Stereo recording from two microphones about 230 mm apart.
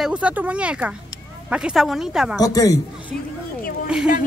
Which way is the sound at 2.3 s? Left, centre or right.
Centre.